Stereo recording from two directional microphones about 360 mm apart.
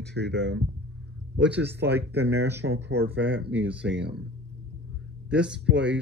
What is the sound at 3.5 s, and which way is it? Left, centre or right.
Speech, centre.